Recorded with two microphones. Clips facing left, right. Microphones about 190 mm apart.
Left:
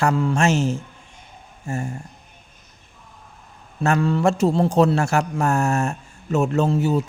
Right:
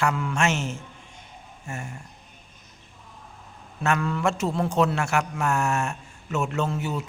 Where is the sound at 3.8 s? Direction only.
30° left (ahead or behind).